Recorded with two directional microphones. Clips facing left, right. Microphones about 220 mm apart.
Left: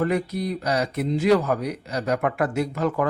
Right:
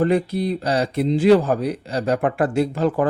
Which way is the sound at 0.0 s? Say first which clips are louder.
Right 5 dB; 30° right (ahead or behind).